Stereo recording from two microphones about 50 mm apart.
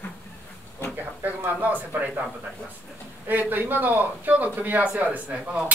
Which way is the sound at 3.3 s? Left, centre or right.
Right.